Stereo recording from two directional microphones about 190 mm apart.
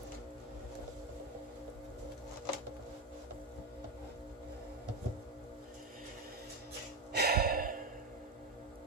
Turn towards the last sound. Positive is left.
turn(degrees=-50)  # may be behind; listen again after turning